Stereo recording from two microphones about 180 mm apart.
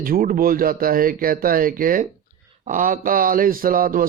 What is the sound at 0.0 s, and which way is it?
Speech, 55° right (ahead or behind).